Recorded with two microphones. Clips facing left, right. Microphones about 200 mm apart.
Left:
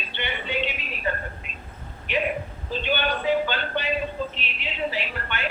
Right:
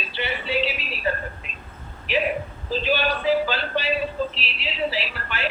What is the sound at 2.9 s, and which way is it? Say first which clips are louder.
Speech: right 2 dB; 35° right (ahead or behind).